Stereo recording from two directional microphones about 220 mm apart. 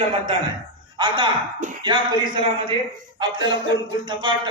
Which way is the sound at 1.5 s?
35° right (ahead or behind).